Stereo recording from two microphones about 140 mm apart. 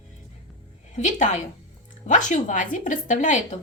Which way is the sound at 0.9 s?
60° left (ahead or behind).